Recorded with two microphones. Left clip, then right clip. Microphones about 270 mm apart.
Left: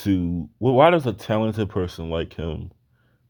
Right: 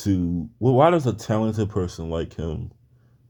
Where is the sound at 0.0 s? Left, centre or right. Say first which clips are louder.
Left 1 dB; left.